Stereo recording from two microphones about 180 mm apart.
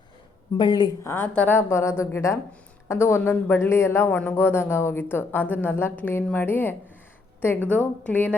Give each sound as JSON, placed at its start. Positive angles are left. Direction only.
{"t": 0.5, "sound": "a woman's voice", "side_deg": 25}